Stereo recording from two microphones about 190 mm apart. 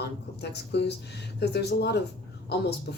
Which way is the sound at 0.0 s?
60° left (ahead or behind).